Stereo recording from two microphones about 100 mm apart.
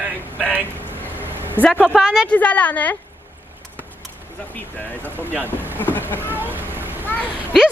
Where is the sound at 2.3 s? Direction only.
15° left (ahead or behind).